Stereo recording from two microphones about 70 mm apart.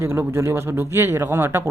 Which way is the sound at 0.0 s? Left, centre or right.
Right.